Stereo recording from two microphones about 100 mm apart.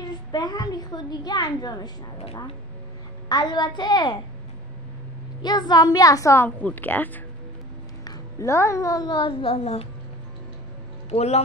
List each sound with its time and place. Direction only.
0.3 s a woman's voice: 40° left (ahead or behind)
3.3 s a woman's voice: 45° left (ahead or behind)
5.4 s a woman's voice: 45° left (ahead or behind)
6.3 s a woman's voice: 15° left (ahead or behind)
8.0 s a woman's voice: 35° left (ahead or behind); by 9.8 s 80° left
11.1 s a man's voice: 90° left